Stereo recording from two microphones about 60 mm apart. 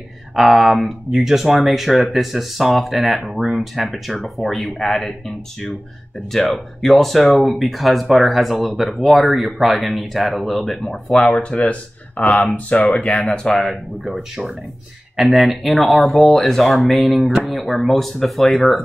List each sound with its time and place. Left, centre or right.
0.4 s speech: centre
11.3 s speech: centre
12.7 s speech: centre